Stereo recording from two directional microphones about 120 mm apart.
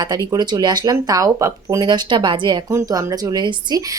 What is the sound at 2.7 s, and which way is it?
Speech, 30° right (ahead or behind).